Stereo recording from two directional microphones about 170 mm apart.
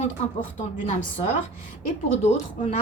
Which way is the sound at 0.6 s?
45° left (ahead or behind).